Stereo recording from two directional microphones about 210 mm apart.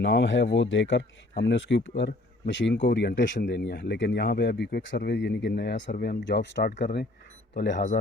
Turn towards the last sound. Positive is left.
turn(degrees=55)  # may be behind; listen again after turning